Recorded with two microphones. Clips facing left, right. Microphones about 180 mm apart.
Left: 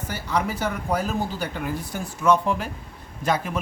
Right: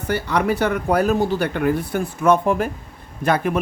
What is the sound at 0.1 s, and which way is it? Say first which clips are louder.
A woman's voice: right 7 dB; 65° right (ahead or behind).